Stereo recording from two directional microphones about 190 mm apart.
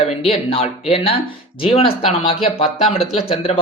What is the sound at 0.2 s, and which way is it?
Speech, 30° left (ahead or behind).